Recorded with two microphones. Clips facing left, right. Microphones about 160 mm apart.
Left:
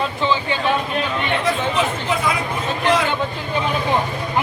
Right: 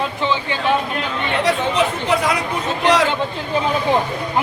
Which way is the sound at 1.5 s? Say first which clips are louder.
Right 4 dB; 75° right (ahead or behind).